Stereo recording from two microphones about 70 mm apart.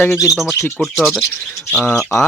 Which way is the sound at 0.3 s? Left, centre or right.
Centre.